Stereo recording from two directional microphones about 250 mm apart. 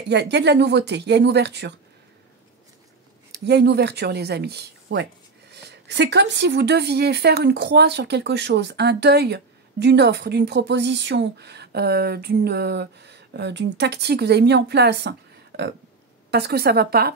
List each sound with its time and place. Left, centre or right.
0.1 s speech: right
3.3 s speech: right